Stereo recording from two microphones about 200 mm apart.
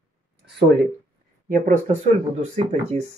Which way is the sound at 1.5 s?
40° right (ahead or behind).